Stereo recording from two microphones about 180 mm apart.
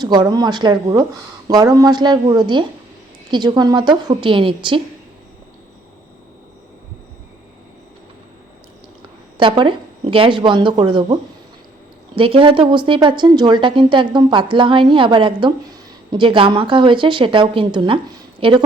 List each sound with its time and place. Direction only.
0.0 s a woman's voice: 25° right (ahead or behind)
9.4 s a woman's voice: 25° right (ahead or behind)